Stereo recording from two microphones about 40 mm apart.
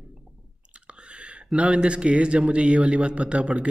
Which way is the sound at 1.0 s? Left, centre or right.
Right.